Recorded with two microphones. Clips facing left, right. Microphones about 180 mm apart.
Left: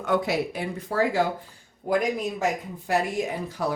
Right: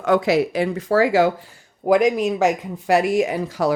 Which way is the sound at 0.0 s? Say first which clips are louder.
Right 7 dB; 90° right.